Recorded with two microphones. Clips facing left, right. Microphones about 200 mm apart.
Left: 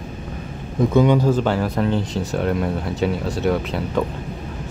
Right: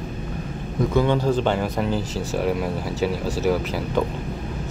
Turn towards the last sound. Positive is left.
turn(degrees=0)  # may be behind; listen again after turning